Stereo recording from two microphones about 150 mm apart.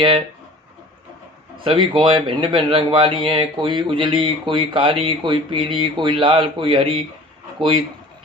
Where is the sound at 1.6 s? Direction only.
35° right (ahead or behind).